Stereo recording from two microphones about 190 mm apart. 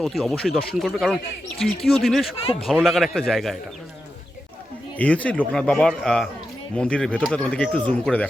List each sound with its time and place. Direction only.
0.0 s speech: centre (ahead or behind)
2.4 s speech: 30° left (ahead or behind)
2.6 s speech: centre (ahead or behind)
4.9 s speech: 5° left (ahead or behind)